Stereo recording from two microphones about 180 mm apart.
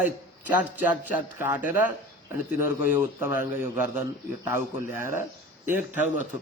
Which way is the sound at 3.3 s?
15° right (ahead or behind).